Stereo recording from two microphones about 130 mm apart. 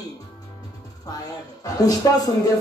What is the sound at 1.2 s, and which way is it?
Speech, 30° left (ahead or behind).